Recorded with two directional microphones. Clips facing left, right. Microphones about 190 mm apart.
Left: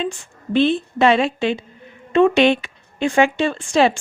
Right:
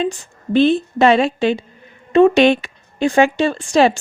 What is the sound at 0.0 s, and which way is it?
Speech, 40° right (ahead or behind).